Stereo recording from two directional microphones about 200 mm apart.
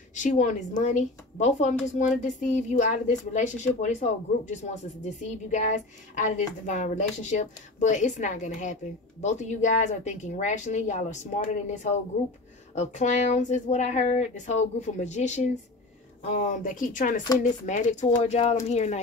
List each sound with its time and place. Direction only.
0.1 s a woman's voice: 40° left (ahead or behind)